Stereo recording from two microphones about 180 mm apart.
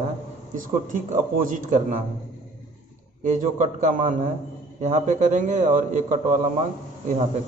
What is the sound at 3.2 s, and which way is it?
A man's voice, 45° right (ahead or behind).